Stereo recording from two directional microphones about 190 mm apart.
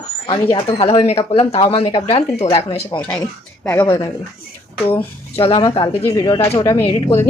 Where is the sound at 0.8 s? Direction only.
30° left (ahead or behind).